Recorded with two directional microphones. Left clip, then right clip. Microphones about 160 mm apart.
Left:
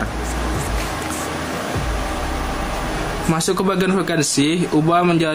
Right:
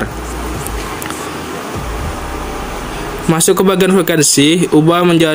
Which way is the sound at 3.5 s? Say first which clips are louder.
Right 9 dB; 30° right (ahead or behind).